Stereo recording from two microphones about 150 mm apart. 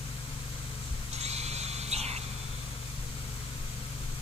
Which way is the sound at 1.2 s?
45° right (ahead or behind).